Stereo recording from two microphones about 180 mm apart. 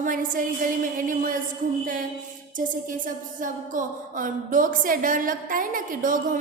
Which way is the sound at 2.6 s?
50° right (ahead or behind).